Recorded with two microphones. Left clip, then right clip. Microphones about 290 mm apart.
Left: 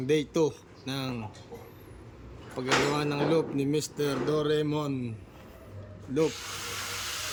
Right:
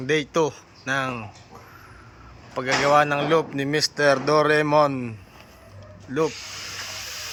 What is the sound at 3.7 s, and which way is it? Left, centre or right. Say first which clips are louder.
Speech: right 10 dB; right.